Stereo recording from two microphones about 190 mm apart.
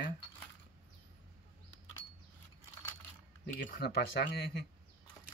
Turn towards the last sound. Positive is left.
turn(degrees=55)  # may be behind; listen again after turning